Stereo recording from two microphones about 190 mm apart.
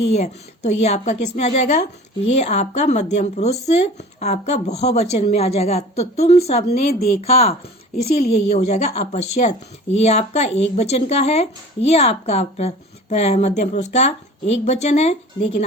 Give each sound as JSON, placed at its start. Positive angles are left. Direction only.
{"t": 0.1, "sound": "speech", "side_deg": 35}